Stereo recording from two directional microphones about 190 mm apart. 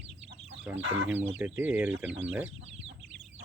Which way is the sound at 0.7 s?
75° right (ahead or behind).